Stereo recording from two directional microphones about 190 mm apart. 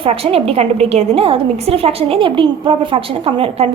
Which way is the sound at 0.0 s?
30° right (ahead or behind).